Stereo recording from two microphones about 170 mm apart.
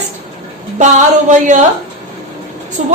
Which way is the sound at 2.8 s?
45° right (ahead or behind).